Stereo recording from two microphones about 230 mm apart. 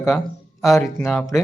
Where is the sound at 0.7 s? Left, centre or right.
Centre.